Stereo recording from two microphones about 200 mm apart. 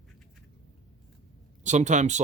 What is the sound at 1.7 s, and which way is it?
Speech, 35° right (ahead or behind).